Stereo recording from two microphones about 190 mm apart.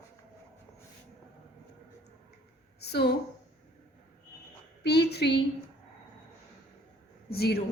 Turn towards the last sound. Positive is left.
turn(degrees=55)  # may be behind; listen again after turning